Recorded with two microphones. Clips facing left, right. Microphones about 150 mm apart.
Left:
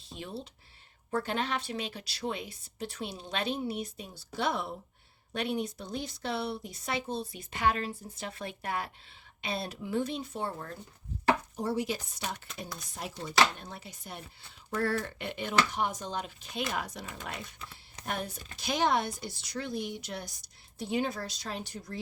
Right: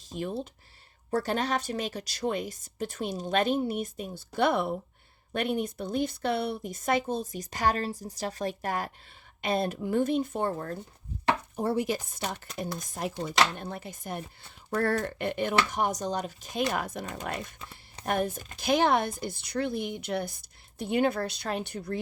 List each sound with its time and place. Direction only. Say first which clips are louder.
0.1 s speech: right 7 dB; 45° right (ahead or behind)